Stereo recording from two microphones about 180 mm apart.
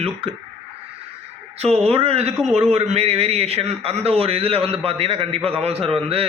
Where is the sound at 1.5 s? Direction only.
35° right (ahead or behind).